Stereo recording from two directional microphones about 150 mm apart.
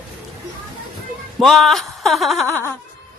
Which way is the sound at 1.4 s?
Centre (ahead or behind).